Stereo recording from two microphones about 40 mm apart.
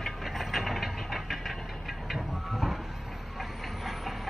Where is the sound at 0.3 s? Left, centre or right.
Centre.